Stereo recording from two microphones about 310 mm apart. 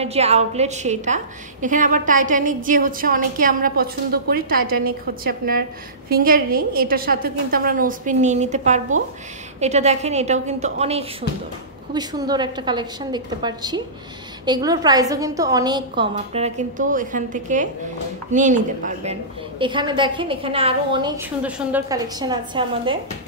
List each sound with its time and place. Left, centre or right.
0.0 s a woman's voice: centre
21.4 s a woman's voice: centre